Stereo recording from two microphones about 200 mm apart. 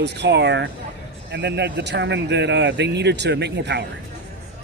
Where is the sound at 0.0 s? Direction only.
60° right (ahead or behind).